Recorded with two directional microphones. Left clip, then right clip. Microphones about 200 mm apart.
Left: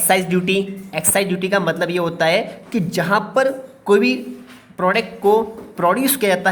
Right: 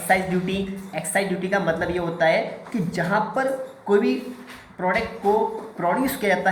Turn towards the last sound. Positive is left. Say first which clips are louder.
# left 5 dB
turn(degrees=35)  # may be behind; listen again after turning